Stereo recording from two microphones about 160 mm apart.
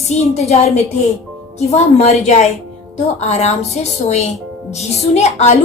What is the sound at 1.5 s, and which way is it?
A woman's voice, 40° left (ahead or behind).